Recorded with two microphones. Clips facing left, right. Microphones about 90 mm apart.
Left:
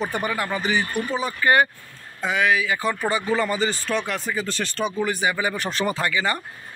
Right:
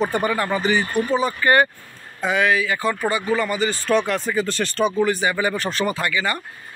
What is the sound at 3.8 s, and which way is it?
Speech, centre (ahead or behind).